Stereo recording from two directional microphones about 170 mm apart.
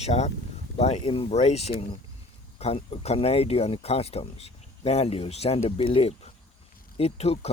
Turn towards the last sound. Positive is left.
turn(degrees=35)  # may be behind; listen again after turning